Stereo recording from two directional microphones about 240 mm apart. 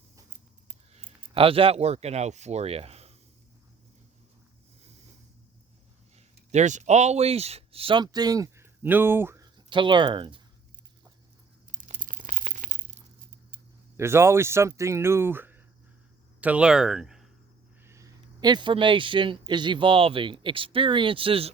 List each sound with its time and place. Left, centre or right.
0.9 s speech: right
6.1 s speech: right
11.7 s crumpling: right
13.9 s speech: centre
17.8 s speech: centre